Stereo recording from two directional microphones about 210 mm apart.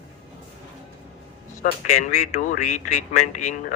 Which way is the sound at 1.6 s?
40° left (ahead or behind).